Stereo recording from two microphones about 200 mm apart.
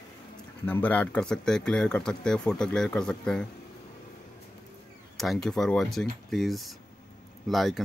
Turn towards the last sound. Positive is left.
turn(degrees=0)  # may be behind; listen again after turning